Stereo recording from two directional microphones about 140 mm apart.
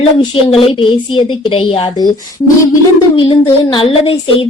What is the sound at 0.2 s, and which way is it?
A woman's voice, 35° left (ahead or behind).